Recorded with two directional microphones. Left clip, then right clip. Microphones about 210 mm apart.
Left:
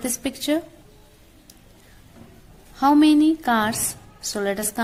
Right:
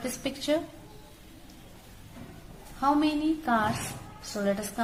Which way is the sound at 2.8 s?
45° left (ahead or behind).